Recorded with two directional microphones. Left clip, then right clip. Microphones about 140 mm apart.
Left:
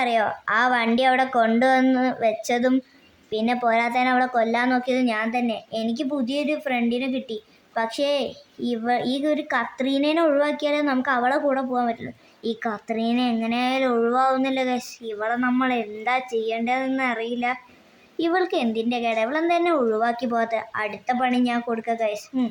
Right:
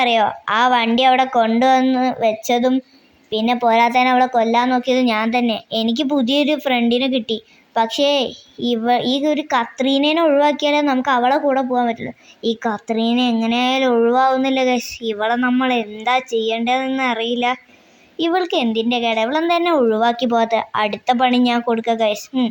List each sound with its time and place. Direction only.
0.0 s a woman's voice: 15° right (ahead or behind); by 22.4 s 30° right (ahead or behind)